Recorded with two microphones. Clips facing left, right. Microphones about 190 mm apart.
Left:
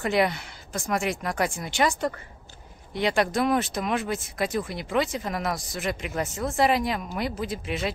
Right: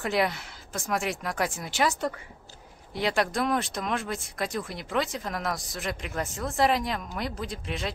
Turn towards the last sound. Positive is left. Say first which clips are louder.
# left 4 dB
turn(degrees=5)  # may be behind; listen again after turning